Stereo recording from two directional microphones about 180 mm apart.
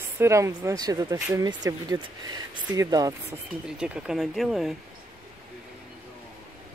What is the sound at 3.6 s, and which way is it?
Speech, 5° right (ahead or behind).